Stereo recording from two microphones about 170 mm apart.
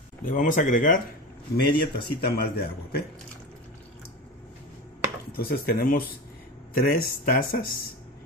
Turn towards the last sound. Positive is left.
turn(degrees=55)  # may be behind; listen again after turning